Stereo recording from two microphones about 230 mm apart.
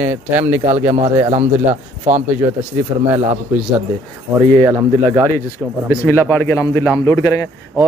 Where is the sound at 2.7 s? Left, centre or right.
Centre.